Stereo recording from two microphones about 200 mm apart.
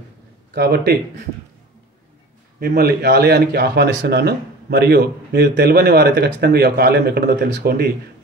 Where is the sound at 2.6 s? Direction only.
50° right (ahead or behind).